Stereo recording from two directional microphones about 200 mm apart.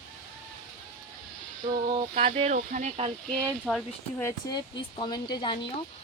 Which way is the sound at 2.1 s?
35° right (ahead or behind).